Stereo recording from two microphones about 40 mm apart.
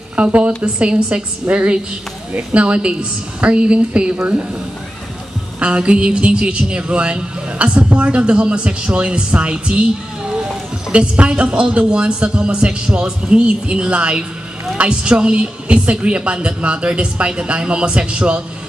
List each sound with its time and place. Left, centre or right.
0.1 s a woman's voice: right
5.6 s a woman's voice: right